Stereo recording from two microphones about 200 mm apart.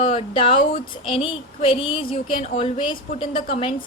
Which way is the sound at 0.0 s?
30° left (ahead or behind).